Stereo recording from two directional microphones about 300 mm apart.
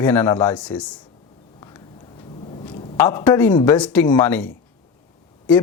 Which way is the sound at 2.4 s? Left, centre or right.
Centre.